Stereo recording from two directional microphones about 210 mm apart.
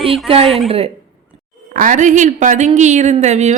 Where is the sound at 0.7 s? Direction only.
30° right (ahead or behind).